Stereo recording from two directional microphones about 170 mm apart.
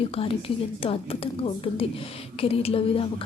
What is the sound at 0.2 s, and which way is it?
A woman's voice, 35° left (ahead or behind).